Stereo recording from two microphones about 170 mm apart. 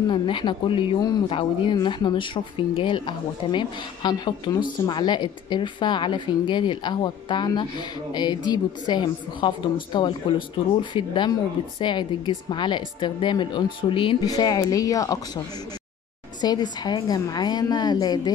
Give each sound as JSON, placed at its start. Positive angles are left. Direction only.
{"t": 0.1, "sound": "speech", "side_deg": 30}